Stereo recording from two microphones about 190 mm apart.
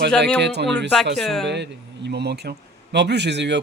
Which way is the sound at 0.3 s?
65° right (ahead or behind).